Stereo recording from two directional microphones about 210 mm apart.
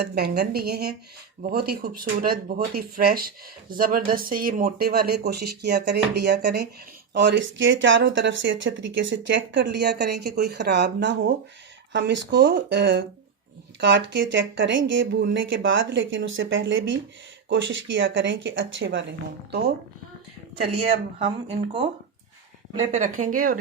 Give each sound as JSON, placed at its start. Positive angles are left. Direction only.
{"t": 0.0, "sound": "speech", "side_deg": -50}
{"t": 21.2, "sound": "speech", "side_deg": -25}
{"t": 22.8, "sound": "speech", "side_deg": -35}